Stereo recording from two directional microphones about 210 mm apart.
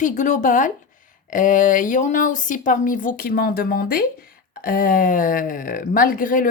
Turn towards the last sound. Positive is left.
turn(degrees=40)  # may be behind; listen again after turning